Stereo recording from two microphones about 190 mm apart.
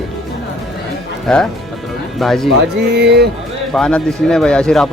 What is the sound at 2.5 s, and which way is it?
Speech, 60° right (ahead or behind).